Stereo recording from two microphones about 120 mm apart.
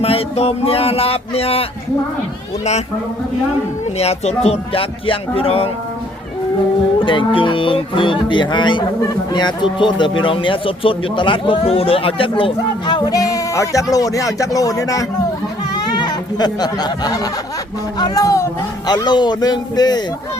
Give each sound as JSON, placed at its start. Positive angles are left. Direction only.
{"t": 0.0, "sound": "speech", "side_deg": 55}
{"t": 3.9, "sound": "speech", "side_deg": 60}
{"t": 7.0, "sound": "speech", "side_deg": 45}
{"t": 15.7, "sound": "a sound", "side_deg": 35}
{"t": 18.0, "sound": "speech", "side_deg": 30}